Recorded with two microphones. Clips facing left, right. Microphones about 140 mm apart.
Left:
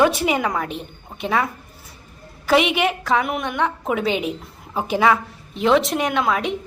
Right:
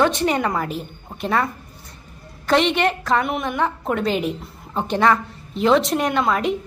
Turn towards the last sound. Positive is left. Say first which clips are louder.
# right 1 dB
turn(degrees=0)  # may be behind; listen again after turning